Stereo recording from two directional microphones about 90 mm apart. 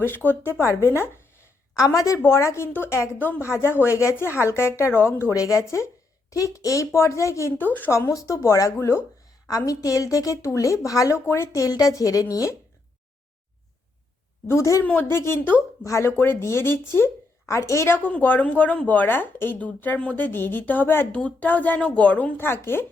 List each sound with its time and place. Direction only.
0.0 s speech: 20° left (ahead or behind)
1.7 s a woman's voice: 40° left (ahead or behind)
7.6 s speech: 20° left (ahead or behind)
7.9 s a woman's voice: 35° left (ahead or behind)
9.5 s a woman's voice: 40° left (ahead or behind)
14.4 s a woman's voice: 30° left (ahead or behind)
15.8 s speech: 35° left (ahead or behind)